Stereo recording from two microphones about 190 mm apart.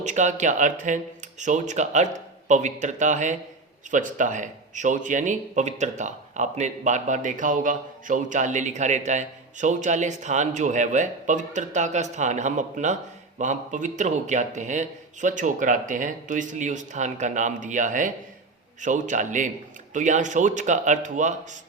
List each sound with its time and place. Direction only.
0.0 s speech: 40° right (ahead or behind)